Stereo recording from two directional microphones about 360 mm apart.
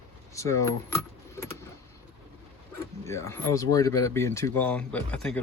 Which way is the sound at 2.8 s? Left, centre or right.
Centre.